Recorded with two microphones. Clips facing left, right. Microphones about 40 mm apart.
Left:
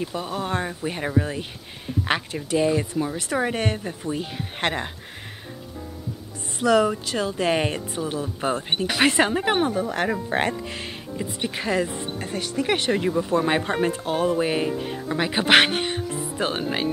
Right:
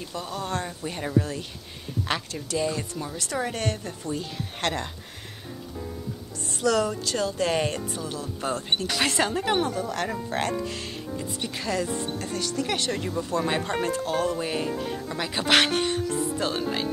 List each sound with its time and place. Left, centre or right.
0.0 s speech: left
6.6 s speech: left
11.1 s speech: left